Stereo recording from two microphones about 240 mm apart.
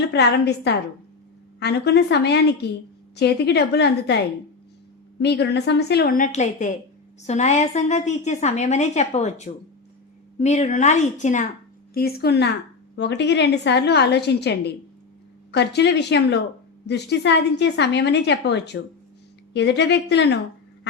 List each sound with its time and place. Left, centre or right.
0.1 s a woman's voice: left
5.2 s a woman's voice: left